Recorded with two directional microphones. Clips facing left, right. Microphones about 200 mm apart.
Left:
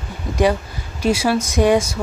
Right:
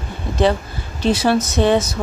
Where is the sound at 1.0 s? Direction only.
10° left (ahead or behind).